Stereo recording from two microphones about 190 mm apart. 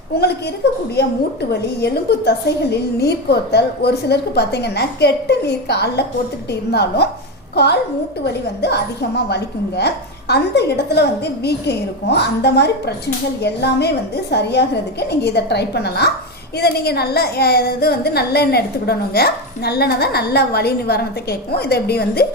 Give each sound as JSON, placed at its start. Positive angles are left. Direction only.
{"t": 0.1, "sound": "a woman's voice", "side_deg": 60}